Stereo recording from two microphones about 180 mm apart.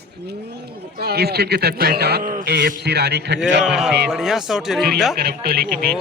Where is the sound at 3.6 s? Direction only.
5° right (ahead or behind).